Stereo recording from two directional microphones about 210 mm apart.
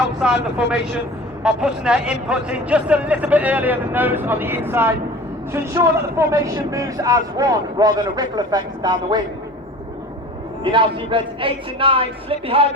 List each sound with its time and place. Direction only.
0.0 s speech: 5° right (ahead or behind)
1.5 s a man's voice: 5° right (ahead or behind); by 9.2 s 20° right (ahead or behind)
10.6 s speech: 25° right (ahead or behind)